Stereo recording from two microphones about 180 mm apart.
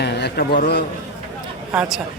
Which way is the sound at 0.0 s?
65° left (ahead or behind).